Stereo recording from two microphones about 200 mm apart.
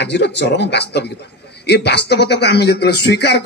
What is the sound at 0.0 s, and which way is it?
A man's voice, 60° left (ahead or behind).